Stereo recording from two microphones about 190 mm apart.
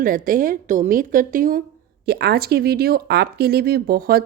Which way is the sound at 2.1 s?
60° right (ahead or behind).